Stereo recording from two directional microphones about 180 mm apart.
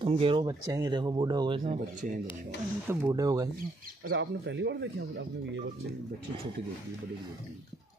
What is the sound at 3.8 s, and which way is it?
Speech, 65° right (ahead or behind).